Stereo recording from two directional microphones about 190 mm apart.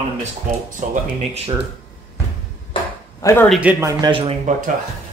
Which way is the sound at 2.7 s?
15° left (ahead or behind).